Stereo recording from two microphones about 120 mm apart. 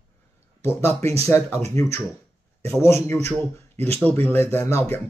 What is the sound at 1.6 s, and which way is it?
Speech, 25° left (ahead or behind).